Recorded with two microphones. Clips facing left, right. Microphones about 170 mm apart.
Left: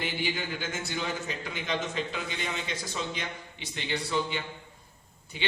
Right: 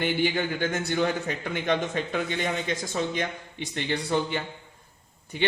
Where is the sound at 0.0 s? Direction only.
55° right (ahead or behind).